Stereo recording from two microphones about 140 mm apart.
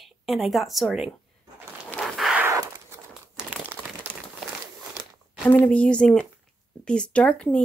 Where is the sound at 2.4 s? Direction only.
20° right (ahead or behind).